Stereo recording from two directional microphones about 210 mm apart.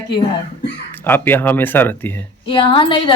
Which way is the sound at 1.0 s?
10° left (ahead or behind).